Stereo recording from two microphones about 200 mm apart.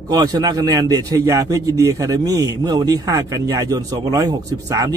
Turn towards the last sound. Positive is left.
turn(degrees=-20)  # may be behind; listen again after turning